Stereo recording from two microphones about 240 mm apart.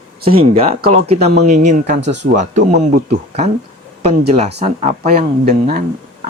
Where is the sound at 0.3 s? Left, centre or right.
Right.